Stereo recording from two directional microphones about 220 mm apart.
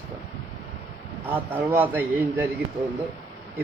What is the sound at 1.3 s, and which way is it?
Speech, 10° right (ahead or behind).